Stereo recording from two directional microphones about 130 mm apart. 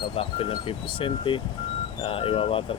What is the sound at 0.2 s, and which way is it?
Speech, 45° left (ahead or behind).